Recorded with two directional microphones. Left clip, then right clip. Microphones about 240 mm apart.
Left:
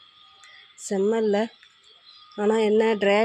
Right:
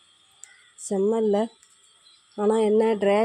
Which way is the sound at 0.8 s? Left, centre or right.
Centre.